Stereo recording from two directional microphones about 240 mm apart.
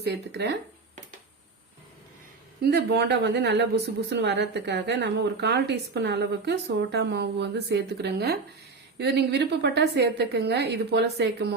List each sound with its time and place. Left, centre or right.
0.0 s a woman's voice: right
2.6 s a woman's voice: right